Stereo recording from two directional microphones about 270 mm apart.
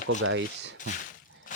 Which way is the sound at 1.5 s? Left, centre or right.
Left.